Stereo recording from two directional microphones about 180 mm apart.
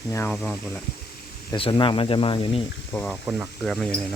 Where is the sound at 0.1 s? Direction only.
10° left (ahead or behind).